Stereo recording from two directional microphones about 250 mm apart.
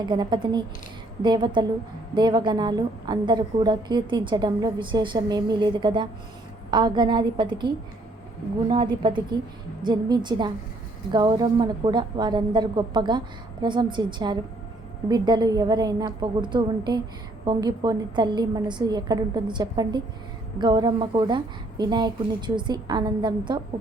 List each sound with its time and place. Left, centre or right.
0.0 s a woman's voice: centre
8.7 s a woman's voice: centre